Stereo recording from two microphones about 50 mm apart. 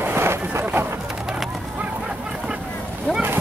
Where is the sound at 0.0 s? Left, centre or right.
Right.